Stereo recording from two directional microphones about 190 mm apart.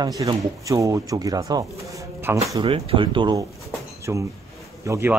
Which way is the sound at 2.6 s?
30° right (ahead or behind).